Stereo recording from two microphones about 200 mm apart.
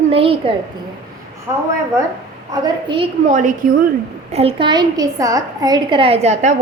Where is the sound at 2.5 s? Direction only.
25° right (ahead or behind).